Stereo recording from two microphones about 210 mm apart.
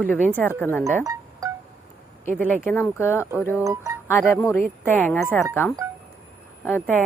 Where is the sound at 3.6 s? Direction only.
15° right (ahead or behind).